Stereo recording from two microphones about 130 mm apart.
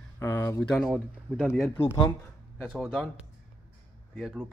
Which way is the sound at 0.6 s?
5° left (ahead or behind).